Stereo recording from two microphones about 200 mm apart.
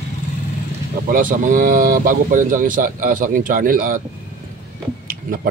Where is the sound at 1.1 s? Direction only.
45° right (ahead or behind).